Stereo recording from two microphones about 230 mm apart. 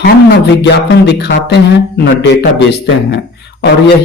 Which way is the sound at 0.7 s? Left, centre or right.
Left.